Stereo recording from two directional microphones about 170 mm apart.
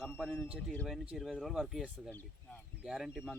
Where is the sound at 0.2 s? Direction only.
5° right (ahead or behind).